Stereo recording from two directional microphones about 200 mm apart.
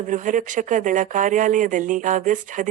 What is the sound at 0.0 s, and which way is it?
Speech, 40° right (ahead or behind).